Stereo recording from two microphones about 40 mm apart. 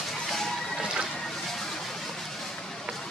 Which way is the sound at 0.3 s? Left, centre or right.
Centre.